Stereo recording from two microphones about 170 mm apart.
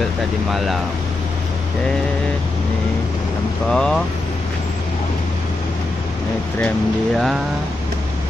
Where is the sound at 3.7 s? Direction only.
5° left (ahead or behind).